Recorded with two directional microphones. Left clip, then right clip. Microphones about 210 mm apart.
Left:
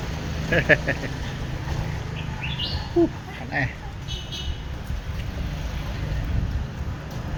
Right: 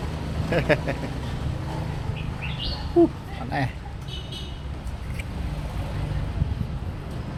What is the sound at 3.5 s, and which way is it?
Speech, 25° right (ahead or behind).